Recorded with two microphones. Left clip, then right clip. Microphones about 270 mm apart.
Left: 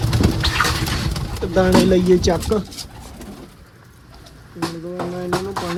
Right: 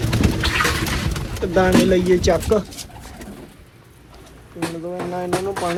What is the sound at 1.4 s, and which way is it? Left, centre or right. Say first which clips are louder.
Speech: even; centre.